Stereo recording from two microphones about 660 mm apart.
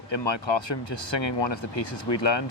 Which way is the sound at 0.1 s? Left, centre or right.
Left.